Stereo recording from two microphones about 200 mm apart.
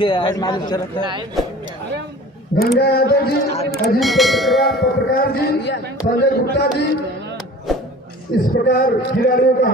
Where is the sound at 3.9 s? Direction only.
Centre (ahead or behind).